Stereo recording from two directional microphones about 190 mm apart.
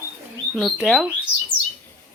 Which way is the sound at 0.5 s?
Centre (ahead or behind).